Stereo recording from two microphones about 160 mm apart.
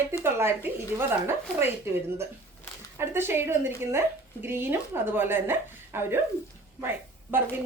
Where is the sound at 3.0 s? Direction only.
15° right (ahead or behind).